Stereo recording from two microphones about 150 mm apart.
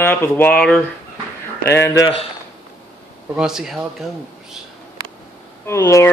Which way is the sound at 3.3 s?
5° right (ahead or behind).